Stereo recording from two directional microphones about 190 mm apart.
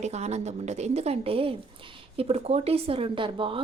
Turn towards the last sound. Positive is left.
turn(degrees=-25)  # may be behind; listen again after turning